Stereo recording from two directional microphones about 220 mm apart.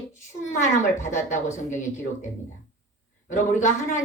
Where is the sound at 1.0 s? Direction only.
35° left (ahead or behind).